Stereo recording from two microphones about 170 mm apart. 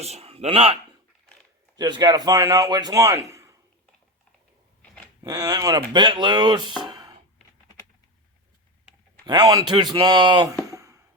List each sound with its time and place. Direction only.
0.0 s speech: 35° right (ahead or behind)
1.7 s a man's voice: 25° right (ahead or behind)
5.2 s a man's voice: 20° right (ahead or behind)
6.8 s a sound: 25° right (ahead or behind)
9.2 s a man's voice: 25° right (ahead or behind)
10.7 s a sound: 20° right (ahead or behind)